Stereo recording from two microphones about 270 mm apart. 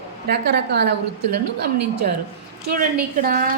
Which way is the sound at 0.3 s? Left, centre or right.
Right.